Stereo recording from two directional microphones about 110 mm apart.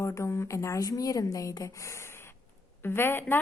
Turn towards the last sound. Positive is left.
turn(degrees=20)  # may be behind; listen again after turning